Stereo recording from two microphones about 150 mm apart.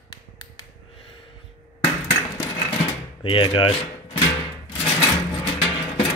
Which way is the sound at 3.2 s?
35° left (ahead or behind).